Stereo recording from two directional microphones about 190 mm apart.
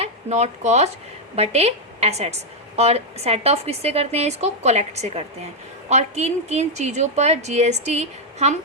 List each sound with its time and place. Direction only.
0.0 s a woman's voice: 35° right (ahead or behind)